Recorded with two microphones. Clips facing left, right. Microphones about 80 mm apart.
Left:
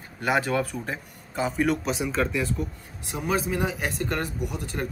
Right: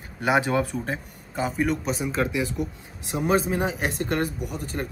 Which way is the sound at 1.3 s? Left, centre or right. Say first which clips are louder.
Even; centre.